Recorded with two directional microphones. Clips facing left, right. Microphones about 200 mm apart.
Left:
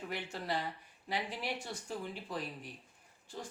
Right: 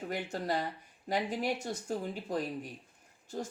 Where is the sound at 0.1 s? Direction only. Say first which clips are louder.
Right 5 dB; 45° right (ahead or behind).